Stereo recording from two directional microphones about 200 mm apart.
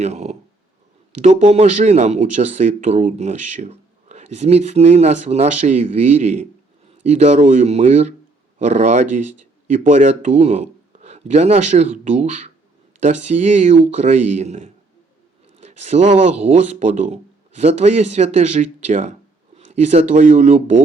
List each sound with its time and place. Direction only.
0.0 s speech: 35° right (ahead or behind)